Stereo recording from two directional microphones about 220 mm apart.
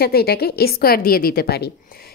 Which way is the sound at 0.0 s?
45° left (ahead or behind).